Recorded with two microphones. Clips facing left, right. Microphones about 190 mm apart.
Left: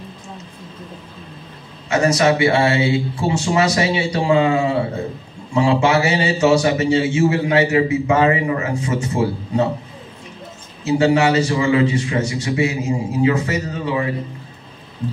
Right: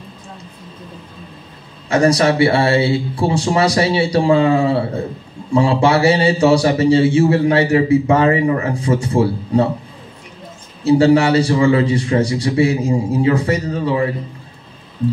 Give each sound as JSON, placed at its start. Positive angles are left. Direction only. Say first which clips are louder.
{"t": 1.9, "sound": "a man's voice", "louder": "right 2 dB", "side_deg": -35}
{"t": 10.8, "sound": "a man's voice", "louder": "right 4 dB", "side_deg": -30}